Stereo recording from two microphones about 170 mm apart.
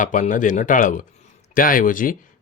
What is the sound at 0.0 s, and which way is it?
Speech, 50° left (ahead or behind).